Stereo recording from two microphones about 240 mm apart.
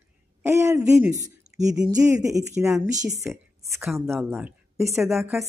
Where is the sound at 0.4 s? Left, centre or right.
Centre.